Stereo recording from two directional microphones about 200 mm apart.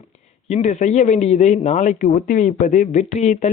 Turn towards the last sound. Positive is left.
turn(degrees=35)  # may be behind; listen again after turning